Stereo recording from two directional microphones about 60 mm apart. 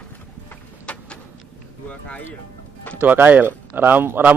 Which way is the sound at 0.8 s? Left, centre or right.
Centre.